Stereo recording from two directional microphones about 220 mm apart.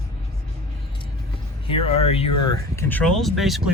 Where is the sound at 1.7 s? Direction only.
25° left (ahead or behind).